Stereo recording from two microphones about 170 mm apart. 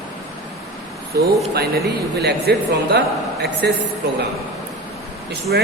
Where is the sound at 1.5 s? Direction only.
70° right (ahead or behind).